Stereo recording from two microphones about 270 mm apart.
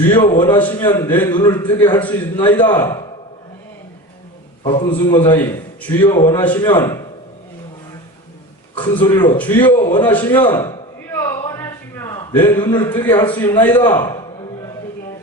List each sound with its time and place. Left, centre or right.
0.1 s a man's voice: centre
4.6 s a man's voice: centre
8.7 s a man's voice: centre
10.4 s a sound: centre
12.9 s a man's voice: centre